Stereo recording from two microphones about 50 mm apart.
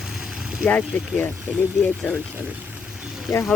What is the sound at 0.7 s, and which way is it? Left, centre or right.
Speech, left.